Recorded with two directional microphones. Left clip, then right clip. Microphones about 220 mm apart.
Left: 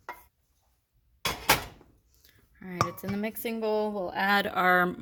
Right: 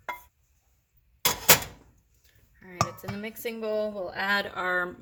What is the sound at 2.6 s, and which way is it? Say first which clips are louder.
Speech: even; 45° left (ahead or behind).